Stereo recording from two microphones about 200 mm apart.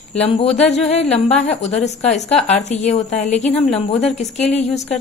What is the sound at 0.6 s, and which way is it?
A woman's voice, 35° left (ahead or behind).